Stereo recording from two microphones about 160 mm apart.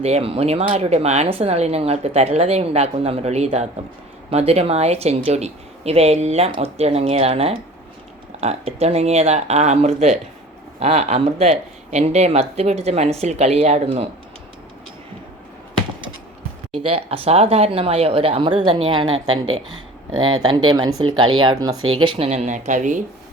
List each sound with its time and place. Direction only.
0.0 s speech: 40° right (ahead or behind)
16.8 s speech: 40° right (ahead or behind)